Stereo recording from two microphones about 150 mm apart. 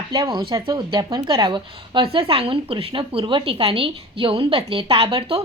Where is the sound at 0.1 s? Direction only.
25° right (ahead or behind).